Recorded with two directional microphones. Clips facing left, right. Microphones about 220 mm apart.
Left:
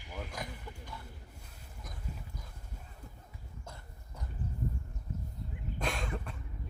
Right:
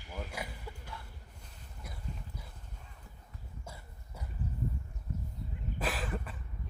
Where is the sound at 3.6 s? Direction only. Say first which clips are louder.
Even; 10° right (ahead or behind).